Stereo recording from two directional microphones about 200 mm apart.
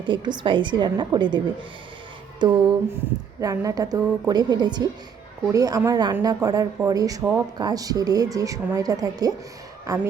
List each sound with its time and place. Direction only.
0.0 s a woman's voice: 25° right (ahead or behind)
2.4 s a woman's voice: 25° right (ahead or behind)